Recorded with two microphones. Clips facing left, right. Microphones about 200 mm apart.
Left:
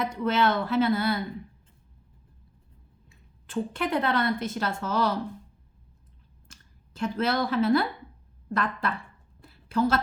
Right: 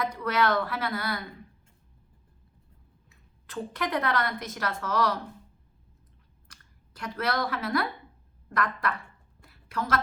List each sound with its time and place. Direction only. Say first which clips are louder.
0.0 s speech: left 2 dB; 25° left (ahead or behind)
3.1 s a woman's voice: left 9 dB; 25° left (ahead or behind)
6.5 s speech: left 4 dB; 25° left (ahead or behind)
9.4 s a sound: left 9 dB; 30° left (ahead or behind)